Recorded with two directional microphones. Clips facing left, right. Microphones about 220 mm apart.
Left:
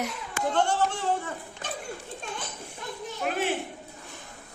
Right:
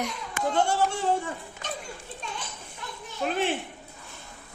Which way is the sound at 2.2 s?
50° left (ahead or behind).